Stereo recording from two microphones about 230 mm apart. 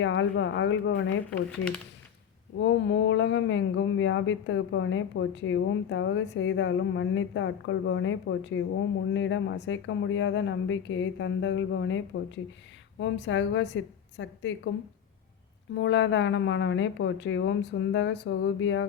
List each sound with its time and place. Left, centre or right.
0.0 s a woman's voice: left
1.4 s speech: centre
2.6 s speech: left
15.7 s speech: left